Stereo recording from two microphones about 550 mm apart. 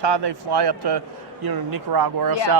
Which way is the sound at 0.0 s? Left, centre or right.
Right.